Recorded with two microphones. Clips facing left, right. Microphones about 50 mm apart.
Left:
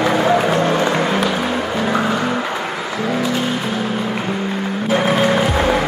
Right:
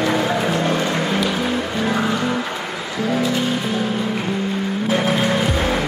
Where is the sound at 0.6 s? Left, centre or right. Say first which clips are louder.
Left 4 dB; centre.